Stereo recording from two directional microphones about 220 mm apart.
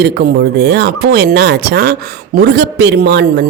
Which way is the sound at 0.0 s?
45° right (ahead or behind).